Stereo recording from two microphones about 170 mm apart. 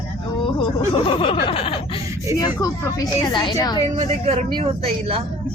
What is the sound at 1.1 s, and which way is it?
Snicker, 30° left (ahead or behind).